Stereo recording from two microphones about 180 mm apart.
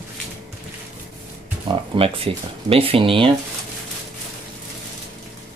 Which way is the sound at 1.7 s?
30° right (ahead or behind).